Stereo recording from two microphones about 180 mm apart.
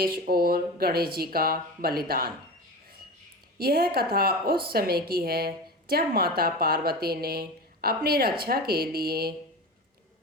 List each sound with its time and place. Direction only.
0.0 s a woman's voice: 55° right (ahead or behind)
3.6 s a woman's voice: 55° right (ahead or behind)